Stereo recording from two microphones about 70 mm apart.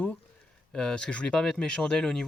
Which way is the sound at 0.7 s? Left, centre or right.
Centre.